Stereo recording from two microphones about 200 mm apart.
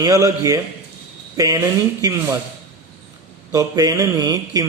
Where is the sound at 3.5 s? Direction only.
15° right (ahead or behind).